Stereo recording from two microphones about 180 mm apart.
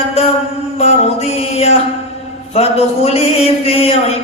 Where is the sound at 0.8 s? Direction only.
35° left (ahead or behind).